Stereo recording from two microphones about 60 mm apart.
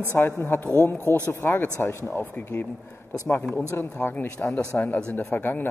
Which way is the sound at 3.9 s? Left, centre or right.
Left.